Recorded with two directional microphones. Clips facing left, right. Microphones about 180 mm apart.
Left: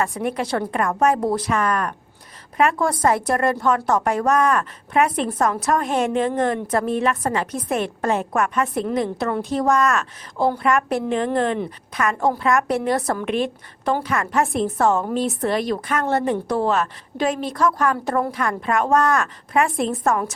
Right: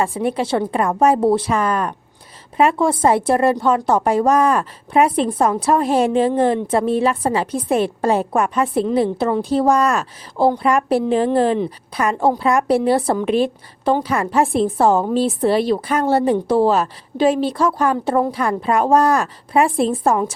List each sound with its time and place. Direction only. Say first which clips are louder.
0.0 s a woman's voice: right 4 dB; 30° right (ahead or behind)